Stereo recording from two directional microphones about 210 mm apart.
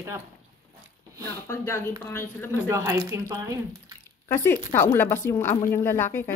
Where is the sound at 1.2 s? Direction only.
10° left (ahead or behind).